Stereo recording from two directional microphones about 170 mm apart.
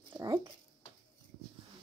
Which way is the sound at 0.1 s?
20° right (ahead or behind).